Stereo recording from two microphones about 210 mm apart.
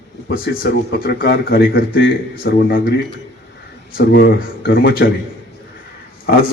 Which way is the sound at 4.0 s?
50° left (ahead or behind).